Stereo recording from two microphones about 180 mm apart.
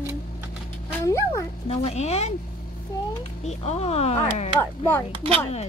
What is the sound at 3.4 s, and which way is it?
A woman's voice, 35° left (ahead or behind).